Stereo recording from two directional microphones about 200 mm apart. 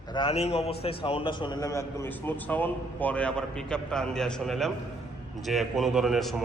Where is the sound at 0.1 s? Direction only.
25° left (ahead or behind).